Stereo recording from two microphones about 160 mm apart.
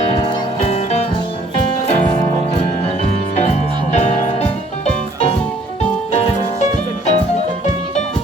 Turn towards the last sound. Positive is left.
turn(degrees=45)  # may be behind; listen again after turning